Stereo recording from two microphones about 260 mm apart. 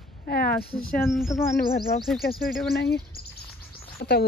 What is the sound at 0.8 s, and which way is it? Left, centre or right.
Speech, centre.